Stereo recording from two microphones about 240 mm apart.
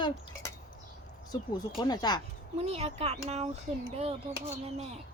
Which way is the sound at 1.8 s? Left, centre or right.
Centre.